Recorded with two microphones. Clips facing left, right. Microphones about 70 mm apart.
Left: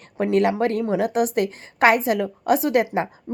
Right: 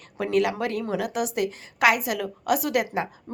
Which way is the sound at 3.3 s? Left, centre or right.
Centre.